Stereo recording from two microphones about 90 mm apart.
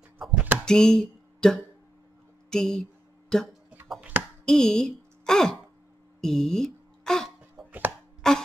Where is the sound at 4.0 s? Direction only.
20° right (ahead or behind).